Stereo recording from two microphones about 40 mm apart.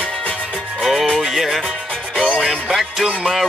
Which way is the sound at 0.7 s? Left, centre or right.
Centre.